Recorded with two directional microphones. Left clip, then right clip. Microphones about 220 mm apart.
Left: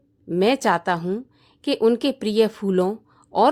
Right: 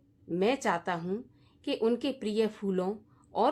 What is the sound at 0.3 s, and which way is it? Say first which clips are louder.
A woman's voice: left 9 dB; 40° left (ahead or behind).